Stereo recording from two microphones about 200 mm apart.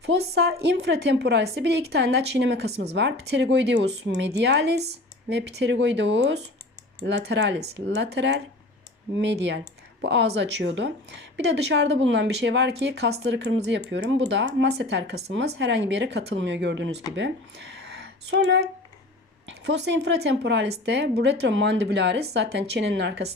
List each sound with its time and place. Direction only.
0.0 s a woman's voice: 55° right (ahead or behind)